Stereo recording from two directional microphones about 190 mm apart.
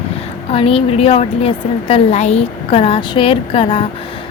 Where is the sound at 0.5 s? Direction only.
30° left (ahead or behind).